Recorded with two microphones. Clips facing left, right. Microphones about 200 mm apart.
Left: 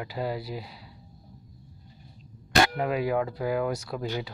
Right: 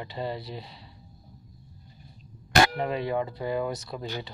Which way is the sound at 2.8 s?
5° left (ahead or behind).